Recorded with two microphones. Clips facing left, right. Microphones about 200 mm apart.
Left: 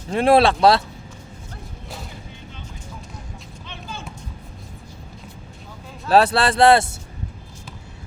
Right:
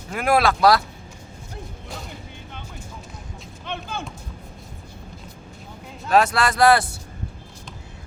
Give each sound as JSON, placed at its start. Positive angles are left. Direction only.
{"t": 0.1, "sound": "speech", "side_deg": 30}
{"t": 3.7, "sound": "a sound", "side_deg": -55}
{"t": 6.1, "sound": "speech", "side_deg": 35}